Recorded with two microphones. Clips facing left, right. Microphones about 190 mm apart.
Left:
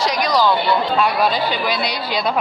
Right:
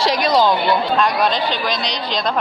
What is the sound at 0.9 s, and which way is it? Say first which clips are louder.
A woman's voice: even; 5° left (ahead or behind).